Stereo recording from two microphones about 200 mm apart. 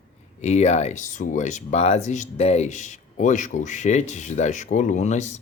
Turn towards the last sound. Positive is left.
turn(degrees=35)  # may be behind; listen again after turning